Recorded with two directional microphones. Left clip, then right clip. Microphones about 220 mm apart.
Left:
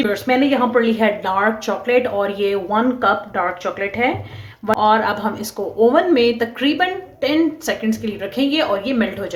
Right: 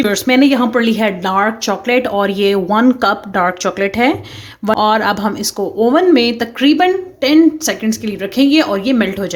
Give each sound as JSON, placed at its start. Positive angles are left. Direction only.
{"t": 0.0, "sound": "speech", "side_deg": -50}